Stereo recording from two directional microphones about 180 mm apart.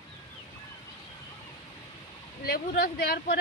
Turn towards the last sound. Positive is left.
turn(degrees=60)  # may be behind; listen again after turning